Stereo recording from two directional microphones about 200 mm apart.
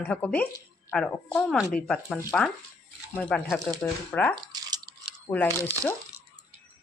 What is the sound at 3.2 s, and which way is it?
Speech, 5° left (ahead or behind).